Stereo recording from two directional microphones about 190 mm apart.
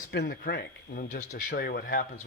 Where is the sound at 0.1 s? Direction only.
55° left (ahead or behind).